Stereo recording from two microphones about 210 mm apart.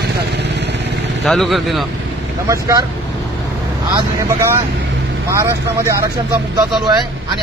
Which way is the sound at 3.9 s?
10° right (ahead or behind).